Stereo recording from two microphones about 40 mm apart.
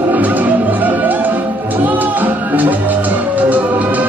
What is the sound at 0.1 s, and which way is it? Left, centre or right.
Music, right.